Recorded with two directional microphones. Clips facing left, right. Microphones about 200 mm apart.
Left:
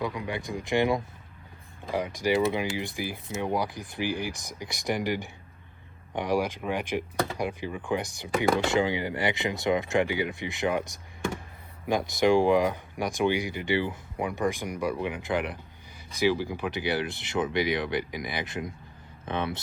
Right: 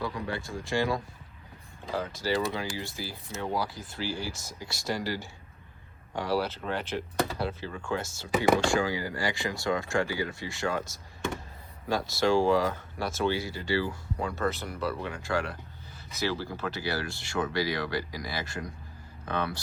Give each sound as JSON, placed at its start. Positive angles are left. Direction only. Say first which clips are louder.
{"t": 0.0, "sound": "speech", "louder": "left 2 dB", "side_deg": 20}